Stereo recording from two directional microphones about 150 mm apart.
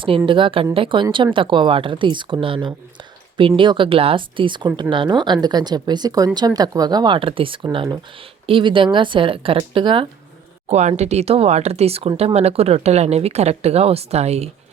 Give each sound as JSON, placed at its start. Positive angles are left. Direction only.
{"t": 0.3, "sound": "speech", "side_deg": -35}
{"t": 10.7, "sound": "speech", "side_deg": -50}